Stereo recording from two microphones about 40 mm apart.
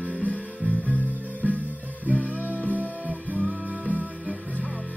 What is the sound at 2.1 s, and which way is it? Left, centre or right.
Music, right.